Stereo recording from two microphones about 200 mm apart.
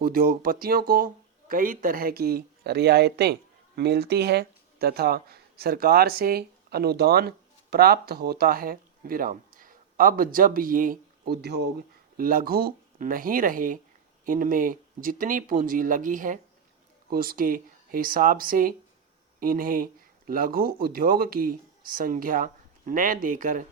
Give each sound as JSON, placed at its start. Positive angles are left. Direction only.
{"t": 0.0, "sound": "speech", "side_deg": -45}